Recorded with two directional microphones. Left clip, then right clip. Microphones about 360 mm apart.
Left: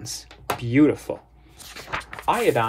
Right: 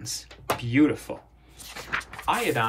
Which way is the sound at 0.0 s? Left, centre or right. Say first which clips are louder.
Left 2 dB; centre.